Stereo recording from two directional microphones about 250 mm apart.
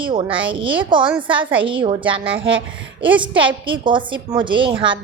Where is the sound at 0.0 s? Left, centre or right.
Centre.